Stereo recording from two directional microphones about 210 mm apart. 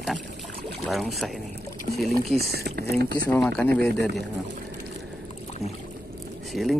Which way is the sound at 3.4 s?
5° left (ahead or behind).